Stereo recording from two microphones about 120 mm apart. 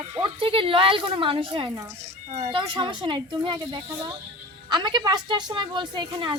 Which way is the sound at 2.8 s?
40° right (ahead or behind).